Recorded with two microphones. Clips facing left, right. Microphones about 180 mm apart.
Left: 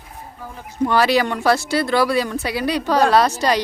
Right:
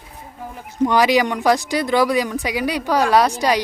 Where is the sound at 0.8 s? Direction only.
15° right (ahead or behind).